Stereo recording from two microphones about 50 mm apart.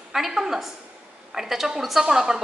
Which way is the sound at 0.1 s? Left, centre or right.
Centre.